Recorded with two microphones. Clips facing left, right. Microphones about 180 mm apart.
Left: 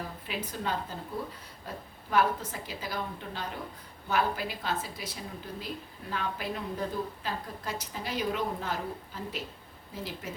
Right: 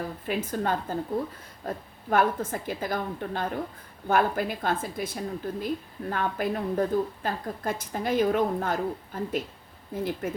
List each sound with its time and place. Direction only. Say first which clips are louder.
0.3 s speech: right 7 dB; 50° right (ahead or behind)